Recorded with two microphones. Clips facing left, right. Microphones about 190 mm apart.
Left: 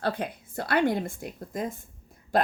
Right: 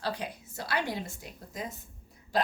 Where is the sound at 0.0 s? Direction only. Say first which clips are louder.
Left 5 dB; 55° left (ahead or behind).